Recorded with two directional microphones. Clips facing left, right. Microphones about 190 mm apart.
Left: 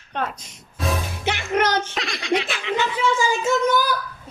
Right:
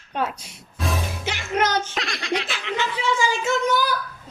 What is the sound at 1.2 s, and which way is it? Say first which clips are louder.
Music: left 3 dB; 60° left (ahead or behind).